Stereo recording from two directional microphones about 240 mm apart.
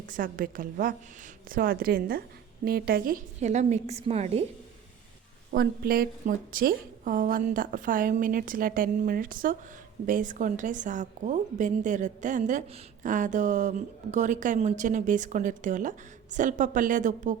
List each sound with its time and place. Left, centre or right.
0.1 s a woman's voice: right
5.5 s a woman's voice: right